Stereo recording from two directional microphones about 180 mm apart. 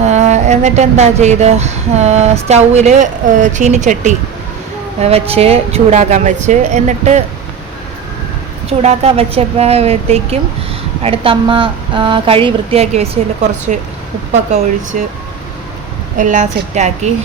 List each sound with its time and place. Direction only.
0.0 s speech: 40° right (ahead or behind)
8.8 s speech: 35° right (ahead or behind)
14.9 s a woman's voice: 45° right (ahead or behind)
16.1 s a woman's voice: 45° right (ahead or behind)